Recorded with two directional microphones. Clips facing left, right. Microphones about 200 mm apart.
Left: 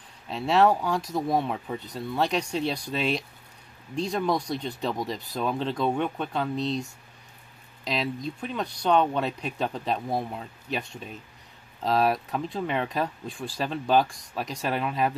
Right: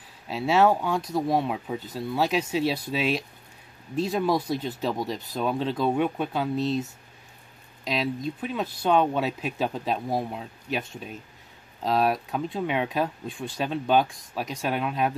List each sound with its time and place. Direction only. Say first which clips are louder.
0.3 s speech: right 1 dB; 5° right (ahead or behind)